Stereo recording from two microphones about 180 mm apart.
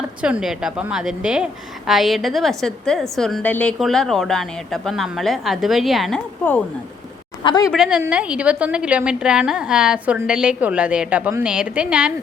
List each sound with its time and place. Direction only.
0.2 s a woman's voice: 5° right (ahead or behind)
7.4 s a woman's voice: 25° left (ahead or behind)
7.7 s a woman's voice: 5° right (ahead or behind)